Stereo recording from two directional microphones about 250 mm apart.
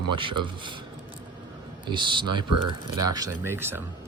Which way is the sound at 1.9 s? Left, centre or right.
Centre.